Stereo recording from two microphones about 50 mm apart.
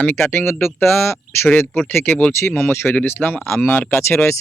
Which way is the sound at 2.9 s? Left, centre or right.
Left.